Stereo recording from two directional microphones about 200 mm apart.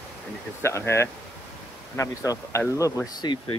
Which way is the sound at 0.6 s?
15° left (ahead or behind).